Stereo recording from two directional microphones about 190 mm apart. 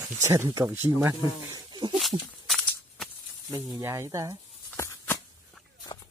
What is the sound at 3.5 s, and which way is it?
Speech, 20° right (ahead or behind).